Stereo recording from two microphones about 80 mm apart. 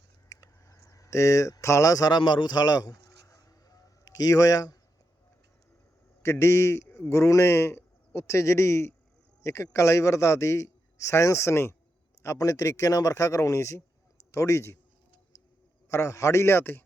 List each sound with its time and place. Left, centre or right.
0.3 s a sound: left
6.2 s a man's voice: left
15.9 s a man's voice: left